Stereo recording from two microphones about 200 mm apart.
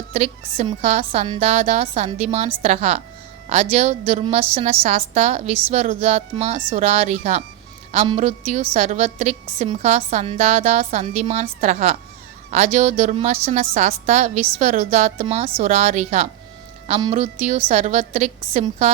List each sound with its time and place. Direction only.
0.1 s a woman's voice: 30° right (ahead or behind)